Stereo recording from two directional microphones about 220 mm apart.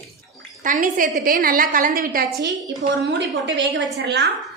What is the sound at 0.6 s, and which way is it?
A woman's voice, 35° right (ahead or behind).